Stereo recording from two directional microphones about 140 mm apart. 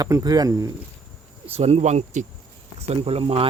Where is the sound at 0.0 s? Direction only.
25° right (ahead or behind).